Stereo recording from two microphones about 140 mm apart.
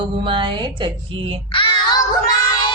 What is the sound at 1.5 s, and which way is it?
Child singing, 40° left (ahead or behind).